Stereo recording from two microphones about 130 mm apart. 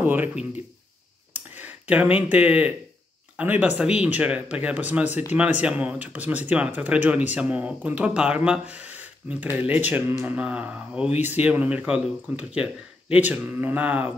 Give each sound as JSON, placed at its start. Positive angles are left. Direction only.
{"t": 0.0, "sound": "speech", "side_deg": -15}
{"t": 1.3, "sound": "a sound", "side_deg": -15}
{"t": 2.1, "sound": "speech", "side_deg": -10}